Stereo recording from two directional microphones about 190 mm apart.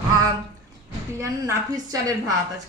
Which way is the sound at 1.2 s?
15° right (ahead or behind).